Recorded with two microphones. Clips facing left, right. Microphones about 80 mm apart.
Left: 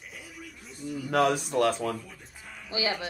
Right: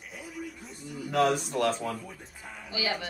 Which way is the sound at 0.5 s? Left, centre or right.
Centre.